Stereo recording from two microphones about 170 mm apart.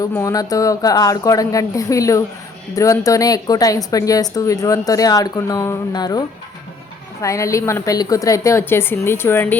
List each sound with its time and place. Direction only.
0.1 s a woman's voice: 15° left (ahead or behind)